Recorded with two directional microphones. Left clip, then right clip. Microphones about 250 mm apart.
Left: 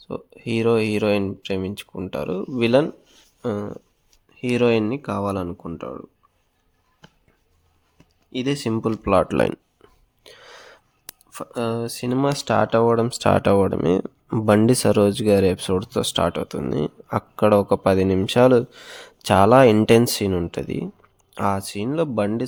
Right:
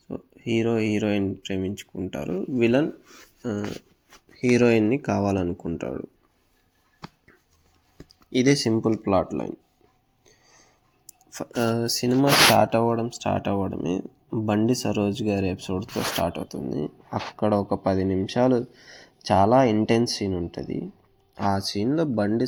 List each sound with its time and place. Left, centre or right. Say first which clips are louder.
0.5 s speech: left 4 dB; left; by 6.0 s centre
8.3 s speech: right 4 dB; centre
8.7 s speech: left 3 dB; left
10.2 s a sound: left 14 dB; left
11.3 s speech: even; centre
16.6 s speech: left 6 dB; left
21.8 s speech: left 2 dB; centre